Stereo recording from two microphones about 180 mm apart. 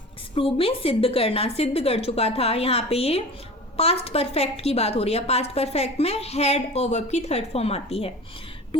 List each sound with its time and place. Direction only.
0.3 s a woman's voice: 30° left (ahead or behind)